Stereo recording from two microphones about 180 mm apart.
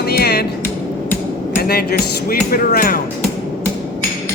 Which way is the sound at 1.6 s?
60° left (ahead or behind).